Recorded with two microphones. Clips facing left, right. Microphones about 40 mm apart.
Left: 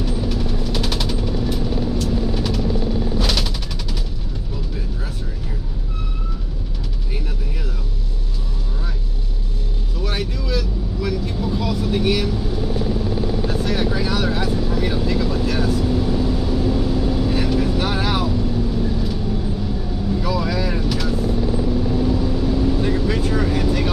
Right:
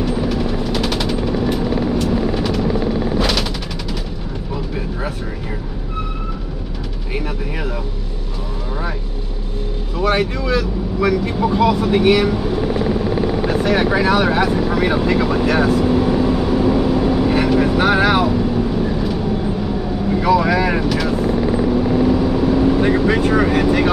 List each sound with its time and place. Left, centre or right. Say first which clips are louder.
0.0 s vehicle: right 5 dB; right
1.6 s vehicle: right 5 dB; right
3.2 s gunshot: right 4 dB; right
9.9 s vehicle: right 9 dB; right